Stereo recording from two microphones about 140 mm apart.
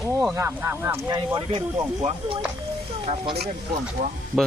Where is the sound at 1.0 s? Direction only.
30° right (ahead or behind); by 3.3 s 45° right (ahead or behind).